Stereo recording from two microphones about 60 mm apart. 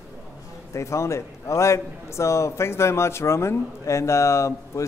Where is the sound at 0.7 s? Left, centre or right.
Left.